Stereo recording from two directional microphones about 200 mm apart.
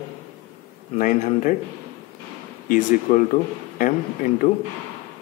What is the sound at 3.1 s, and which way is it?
Speech, 40° left (ahead or behind).